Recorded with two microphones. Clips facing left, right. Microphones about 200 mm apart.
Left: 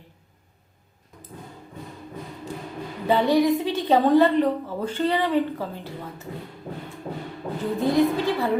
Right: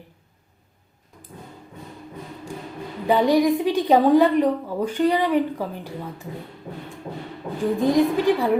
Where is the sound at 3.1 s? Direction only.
15° right (ahead or behind).